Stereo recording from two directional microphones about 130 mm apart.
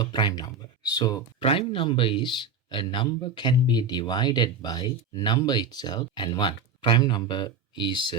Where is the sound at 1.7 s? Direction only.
40° left (ahead or behind).